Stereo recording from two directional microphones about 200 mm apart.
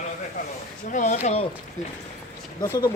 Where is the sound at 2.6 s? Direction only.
20° left (ahead or behind).